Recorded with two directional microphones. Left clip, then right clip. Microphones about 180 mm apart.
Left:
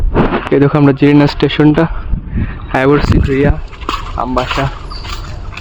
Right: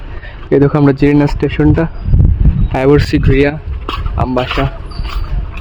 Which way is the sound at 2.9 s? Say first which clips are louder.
Right 3 dB; 20° right (ahead or behind).